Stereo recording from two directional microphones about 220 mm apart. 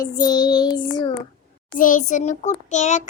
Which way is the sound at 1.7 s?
35° left (ahead or behind).